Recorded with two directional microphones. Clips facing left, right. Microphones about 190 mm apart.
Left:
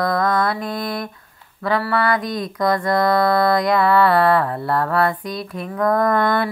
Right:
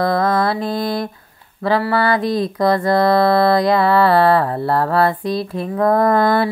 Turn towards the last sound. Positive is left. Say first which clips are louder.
# right 3 dB
turn(degrees=-30)  # may be behind; listen again after turning